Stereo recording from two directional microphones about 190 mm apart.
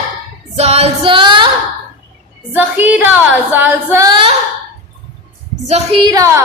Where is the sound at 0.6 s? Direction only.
35° right (ahead or behind).